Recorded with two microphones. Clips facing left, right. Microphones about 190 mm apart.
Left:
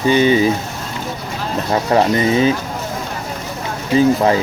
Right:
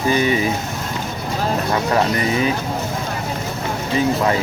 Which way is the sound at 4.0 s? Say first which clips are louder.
Left 5 dB; 30° left (ahead or behind).